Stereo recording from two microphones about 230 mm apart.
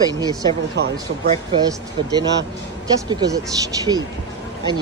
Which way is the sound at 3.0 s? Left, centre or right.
Centre.